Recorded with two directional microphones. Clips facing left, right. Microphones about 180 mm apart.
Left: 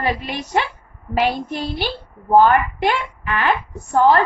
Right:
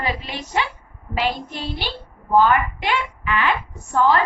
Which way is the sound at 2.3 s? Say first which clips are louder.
Left 3 dB; 45° left (ahead or behind).